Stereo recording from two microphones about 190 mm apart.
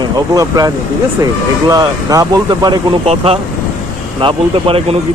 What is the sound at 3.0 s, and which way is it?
Speech, 30° right (ahead or behind).